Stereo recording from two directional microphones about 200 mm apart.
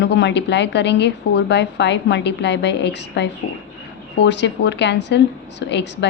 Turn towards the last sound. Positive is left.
turn(degrees=60)  # may be behind; listen again after turning